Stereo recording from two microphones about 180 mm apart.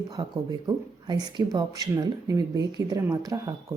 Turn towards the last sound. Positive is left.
turn(degrees=-20)  # may be behind; listen again after turning